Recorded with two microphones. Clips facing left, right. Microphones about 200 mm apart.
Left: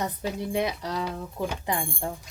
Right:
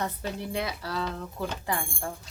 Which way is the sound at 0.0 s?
15° left (ahead or behind).